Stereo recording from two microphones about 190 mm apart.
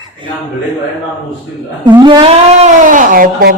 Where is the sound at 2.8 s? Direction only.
45° right (ahead or behind).